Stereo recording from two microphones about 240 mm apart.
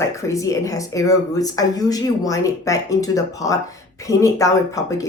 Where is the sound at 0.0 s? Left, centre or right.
Centre.